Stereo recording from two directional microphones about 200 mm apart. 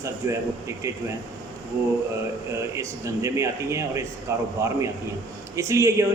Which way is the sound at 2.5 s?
15° right (ahead or behind).